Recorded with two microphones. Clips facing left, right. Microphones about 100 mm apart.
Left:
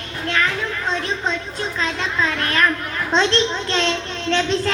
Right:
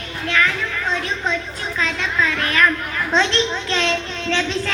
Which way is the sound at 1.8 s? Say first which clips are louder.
Right 1 dB; 35° left (ahead or behind).